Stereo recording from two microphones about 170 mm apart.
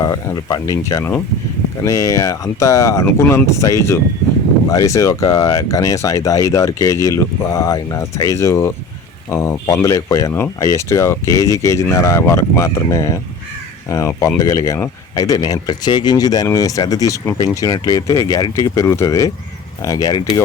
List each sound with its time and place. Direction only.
0.0 s speech: 20° left (ahead or behind)